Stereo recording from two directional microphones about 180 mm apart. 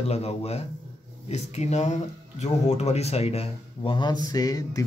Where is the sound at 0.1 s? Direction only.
35° left (ahead or behind).